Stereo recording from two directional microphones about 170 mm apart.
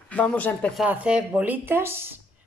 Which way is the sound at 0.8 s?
5° right (ahead or behind).